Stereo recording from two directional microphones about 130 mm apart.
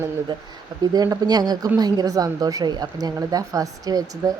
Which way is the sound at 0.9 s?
30° right (ahead or behind).